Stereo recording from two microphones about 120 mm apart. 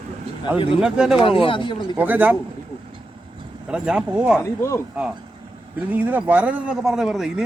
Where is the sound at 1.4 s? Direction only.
45° left (ahead or behind).